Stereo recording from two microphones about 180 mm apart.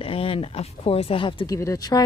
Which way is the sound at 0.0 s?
30° left (ahead or behind).